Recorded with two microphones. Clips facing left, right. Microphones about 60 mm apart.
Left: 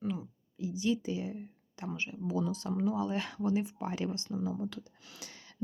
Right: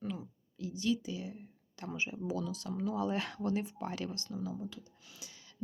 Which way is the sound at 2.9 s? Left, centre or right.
Centre.